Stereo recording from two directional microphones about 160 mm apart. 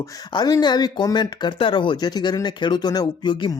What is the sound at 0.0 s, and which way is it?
Speech, 25° left (ahead or behind).